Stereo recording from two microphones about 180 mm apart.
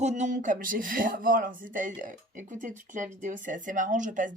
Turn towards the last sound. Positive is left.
turn(degrees=-45)  # may be behind; listen again after turning